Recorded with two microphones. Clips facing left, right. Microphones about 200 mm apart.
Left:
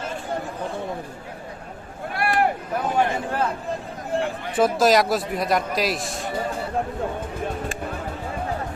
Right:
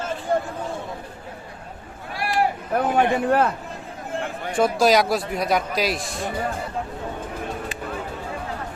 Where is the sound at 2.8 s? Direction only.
60° right (ahead or behind).